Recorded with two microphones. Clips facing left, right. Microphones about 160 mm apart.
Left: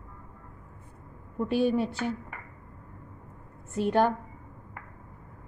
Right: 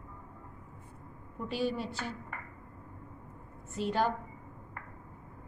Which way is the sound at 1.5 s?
55° left (ahead or behind).